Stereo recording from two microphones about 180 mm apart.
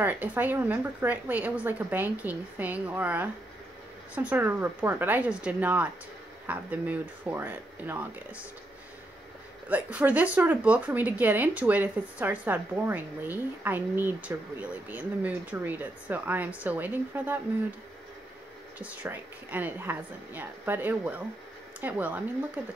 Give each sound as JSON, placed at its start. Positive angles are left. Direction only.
{"t": 0.0, "sound": "speech", "side_deg": -10}
{"t": 9.7, "sound": "speech", "side_deg": -10}
{"t": 18.8, "sound": "speech", "side_deg": -10}